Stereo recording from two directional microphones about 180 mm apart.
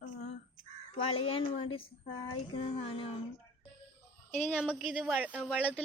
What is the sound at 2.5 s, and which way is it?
Music, 30° left (ahead or behind).